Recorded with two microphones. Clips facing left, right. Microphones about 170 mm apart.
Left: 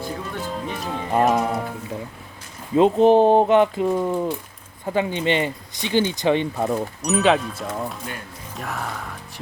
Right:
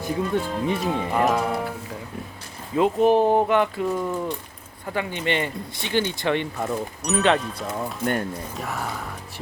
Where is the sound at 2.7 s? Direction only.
25° left (ahead or behind).